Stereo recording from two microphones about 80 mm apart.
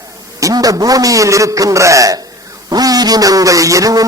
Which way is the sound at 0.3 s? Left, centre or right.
Right.